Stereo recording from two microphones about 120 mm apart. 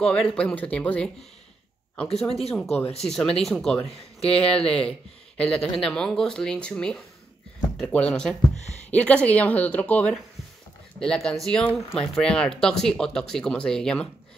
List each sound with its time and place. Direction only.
0.0 s speech: 5° left (ahead or behind)
2.1 s speech: 55° left (ahead or behind)
2.5 s speech: 5° left (ahead or behind)
3.9 s speech: 60° left (ahead or behind)
5.4 s speech: 5° left (ahead or behind)